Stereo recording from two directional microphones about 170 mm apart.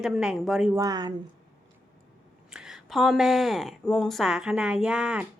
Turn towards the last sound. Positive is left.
turn(degrees=-5)  # may be behind; listen again after turning